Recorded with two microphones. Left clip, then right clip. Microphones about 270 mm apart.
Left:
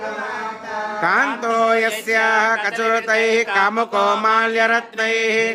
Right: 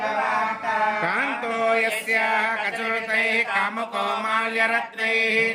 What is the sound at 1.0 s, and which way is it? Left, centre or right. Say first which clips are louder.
Music: left 7 dB; centre.